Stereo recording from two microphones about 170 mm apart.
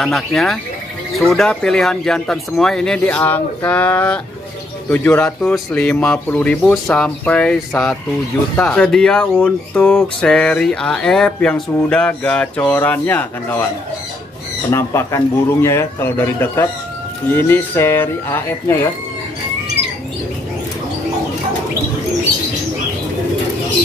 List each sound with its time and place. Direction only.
0.0 s speech: centre (ahead or behind)
14.7 s speech: 15° left (ahead or behind)